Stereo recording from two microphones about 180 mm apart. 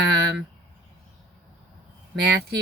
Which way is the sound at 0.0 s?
70° right (ahead or behind).